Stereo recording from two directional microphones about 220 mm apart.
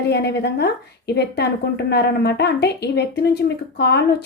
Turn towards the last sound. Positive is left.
turn(degrees=50)  # may be behind; listen again after turning